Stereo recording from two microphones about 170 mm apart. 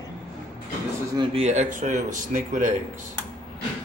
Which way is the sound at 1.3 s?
45° right (ahead or behind).